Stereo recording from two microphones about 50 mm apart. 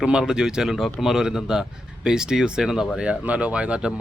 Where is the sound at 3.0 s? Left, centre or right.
Right.